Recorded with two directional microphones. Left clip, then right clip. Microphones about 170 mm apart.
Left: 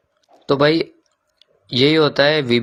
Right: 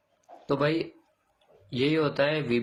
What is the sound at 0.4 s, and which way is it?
Speech, 45° left (ahead or behind).